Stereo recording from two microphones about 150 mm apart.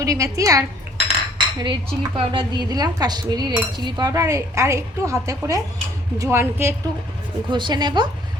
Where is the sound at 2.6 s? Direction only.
25° right (ahead or behind).